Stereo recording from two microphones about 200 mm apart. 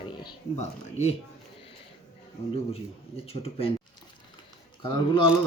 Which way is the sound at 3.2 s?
30° left (ahead or behind).